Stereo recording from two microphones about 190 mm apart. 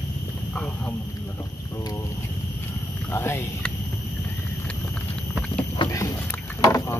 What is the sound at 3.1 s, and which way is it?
Speech, 10° left (ahead or behind).